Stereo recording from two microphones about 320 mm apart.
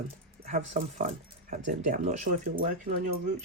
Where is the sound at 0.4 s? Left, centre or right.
Right.